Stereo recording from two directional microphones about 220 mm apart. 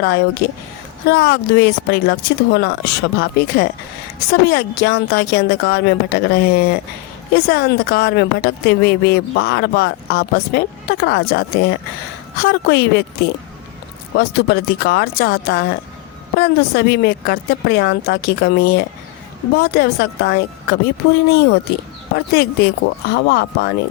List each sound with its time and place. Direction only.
0.0 s a woman's voice: 50° left (ahead or behind)
14.2 s a woman's voice: 50° left (ahead or behind)